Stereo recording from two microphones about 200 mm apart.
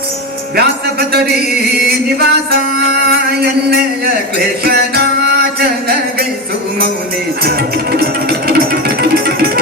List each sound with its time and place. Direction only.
0.5 s music: 50° right (ahead or behind)
7.9 s music: 50° right (ahead or behind)